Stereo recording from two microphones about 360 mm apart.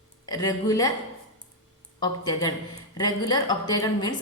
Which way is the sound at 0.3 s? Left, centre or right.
Centre.